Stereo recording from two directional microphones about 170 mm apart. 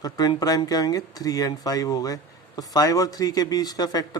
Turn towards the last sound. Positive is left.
turn(degrees=25)  # may be behind; listen again after turning